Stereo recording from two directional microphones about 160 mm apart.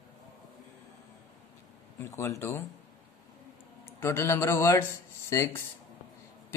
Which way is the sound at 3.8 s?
15° left (ahead or behind).